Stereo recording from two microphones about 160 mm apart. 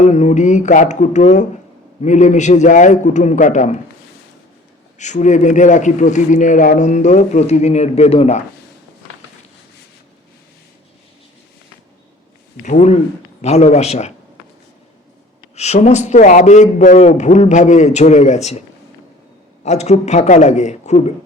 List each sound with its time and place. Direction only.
0.0 s speech: 45° left (ahead or behind)
4.9 s speech: 50° left (ahead or behind)
12.6 s speech: 45° left (ahead or behind)
15.5 s speech: 45° left (ahead or behind)
19.6 s speech: 45° left (ahead or behind)